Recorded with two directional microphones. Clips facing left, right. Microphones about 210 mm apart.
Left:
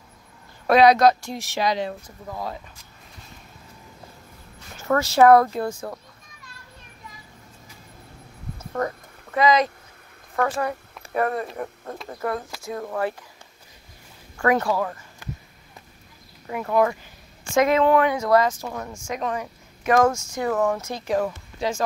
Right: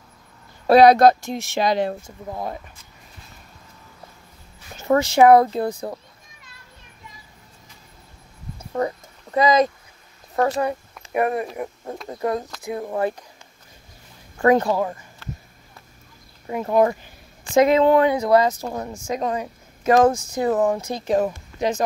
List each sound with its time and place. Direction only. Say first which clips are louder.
0.8 s speech: right 2 dB; 50° right (ahead or behind)
1.2 s speech: right 3 dB; 25° right (ahead or behind)
1.7 s speech: right 5 dB; 50° right (ahead or behind)
2.0 s speech: right 2 dB; 25° right (ahead or behind)
4.7 s speech: right 2 dB; 20° right (ahead or behind)
5.5 s speech: right 3 dB; 30° right (ahead or behind)
8.5 s a sound: right 3 dB; 15° right (ahead or behind)
9.4 s speech: right 2 dB; 45° right (ahead or behind)
10.3 s speech: right 3 dB; 25° right (ahead or behind)
14.4 s speech: right 4 dB; 25° right (ahead or behind)
15.2 s a sound: even; 15° left (ahead or behind)
16.4 s a woman's voice: right 3 dB; 25° right (ahead or behind)
20.3 s speech: right 3 dB; 20° right (ahead or behind)